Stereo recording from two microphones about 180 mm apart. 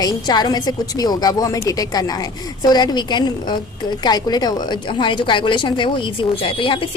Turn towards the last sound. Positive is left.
turn(degrees=30)  # may be behind; listen again after turning